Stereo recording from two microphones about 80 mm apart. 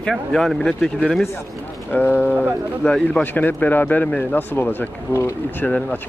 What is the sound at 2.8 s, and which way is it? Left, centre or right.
Speech, centre.